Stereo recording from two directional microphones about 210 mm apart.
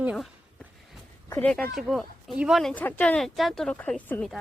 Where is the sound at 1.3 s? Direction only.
5° left (ahead or behind).